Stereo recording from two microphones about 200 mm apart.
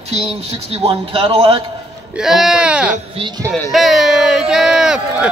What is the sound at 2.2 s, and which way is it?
Speech, centre (ahead or behind).